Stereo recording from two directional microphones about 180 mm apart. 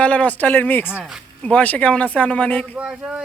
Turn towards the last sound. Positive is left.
turn(degrees=-5)  # may be behind; listen again after turning